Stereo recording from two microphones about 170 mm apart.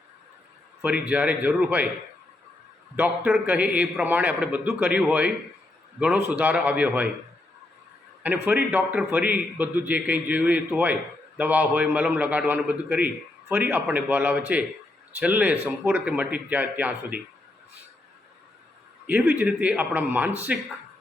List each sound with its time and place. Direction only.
0.8 s a man's voice: 5° right (ahead or behind)
2.9 s a man's voice: 10° right (ahead or behind)
8.2 s a man's voice: 10° right (ahead or behind)
19.0 s a man's voice: 10° right (ahead or behind)